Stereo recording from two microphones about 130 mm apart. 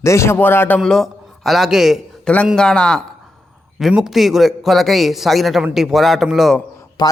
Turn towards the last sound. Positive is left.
turn(degrees=30)  # may be behind; listen again after turning